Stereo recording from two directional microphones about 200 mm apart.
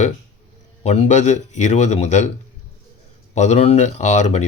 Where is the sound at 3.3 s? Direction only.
35° left (ahead or behind).